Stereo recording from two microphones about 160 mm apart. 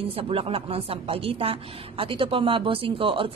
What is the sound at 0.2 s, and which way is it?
A woman's voice, 35° right (ahead or behind).